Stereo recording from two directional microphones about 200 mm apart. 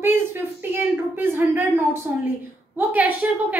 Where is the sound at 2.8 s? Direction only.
10° right (ahead or behind).